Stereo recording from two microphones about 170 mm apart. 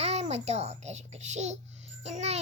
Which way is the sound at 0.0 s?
40° right (ahead or behind).